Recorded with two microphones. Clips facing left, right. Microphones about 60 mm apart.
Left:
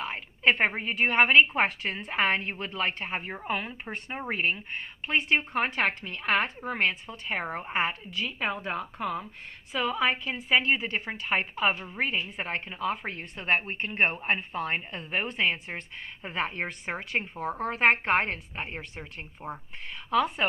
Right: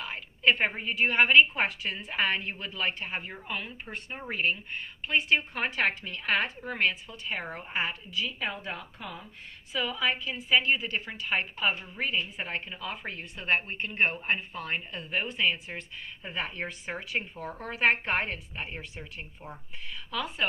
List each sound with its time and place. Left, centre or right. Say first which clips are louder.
0.0 s a sound: left 1 dB; left
0.6 s a woman's voice: left 2 dB; left
17.2 s a woman's voice: left 7 dB; left